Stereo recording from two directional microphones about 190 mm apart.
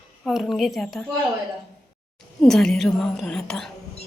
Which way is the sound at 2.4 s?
5° left (ahead or behind).